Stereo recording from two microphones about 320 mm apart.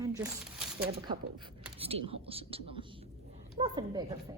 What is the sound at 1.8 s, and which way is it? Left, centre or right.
Speech, centre.